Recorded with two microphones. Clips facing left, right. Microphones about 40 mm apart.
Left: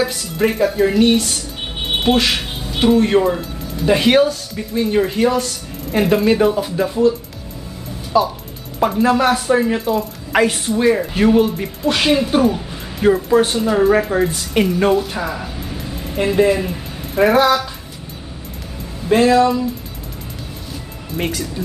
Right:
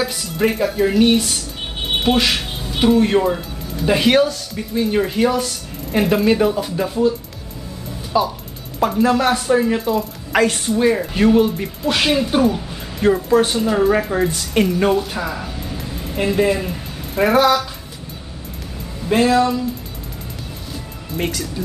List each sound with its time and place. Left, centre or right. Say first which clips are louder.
0.0 s speech: left 1 dB; centre
8.7 s speech: left 1 dB; centre
19.0 s speech: left 3 dB; centre
21.2 s speech: left 1 dB; centre